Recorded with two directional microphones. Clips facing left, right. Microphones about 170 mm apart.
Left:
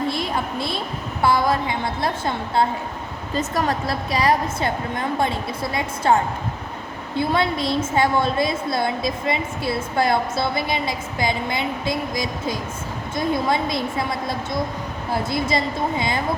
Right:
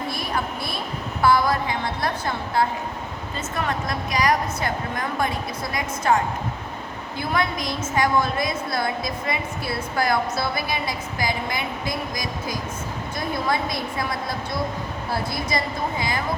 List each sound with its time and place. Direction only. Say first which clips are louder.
0.1 s a sound: left 3 dB; 25° left (ahead or behind)
1.2 s a woman's voice: even; 25° left (ahead or behind)
3.3 s a woman's voice: left 5 dB; 35° left (ahead or behind)
7.2 s a woman's voice: left 4 dB; 30° left (ahead or behind)